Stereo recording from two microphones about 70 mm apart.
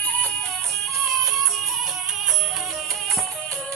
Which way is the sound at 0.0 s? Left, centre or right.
Centre.